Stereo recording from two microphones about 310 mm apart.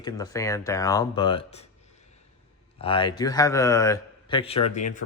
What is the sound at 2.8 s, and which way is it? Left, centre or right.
A man's voice, centre.